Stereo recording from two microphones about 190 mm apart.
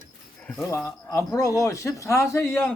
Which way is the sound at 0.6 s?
15° left (ahead or behind).